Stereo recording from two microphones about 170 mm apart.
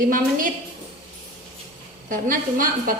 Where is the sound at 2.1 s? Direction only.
55° right (ahead or behind).